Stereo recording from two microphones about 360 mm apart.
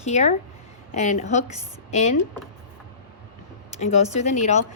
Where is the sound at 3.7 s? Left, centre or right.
Centre.